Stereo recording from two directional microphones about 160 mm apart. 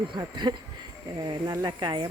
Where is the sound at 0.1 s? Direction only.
25° right (ahead or behind).